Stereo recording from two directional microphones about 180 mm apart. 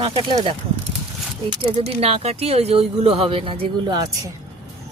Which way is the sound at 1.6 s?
35° right (ahead or behind).